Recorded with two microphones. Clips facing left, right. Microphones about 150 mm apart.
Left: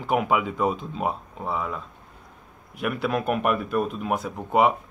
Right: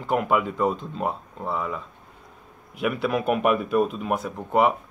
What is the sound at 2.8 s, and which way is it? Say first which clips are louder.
Speech: right 1 dB; centre (ahead or behind).